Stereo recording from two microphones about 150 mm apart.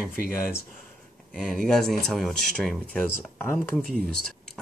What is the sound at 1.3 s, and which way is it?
Speech, 5° left (ahead or behind).